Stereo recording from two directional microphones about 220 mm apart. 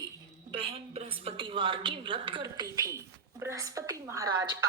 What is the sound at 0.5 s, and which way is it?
A woman's voice, 25° right (ahead or behind).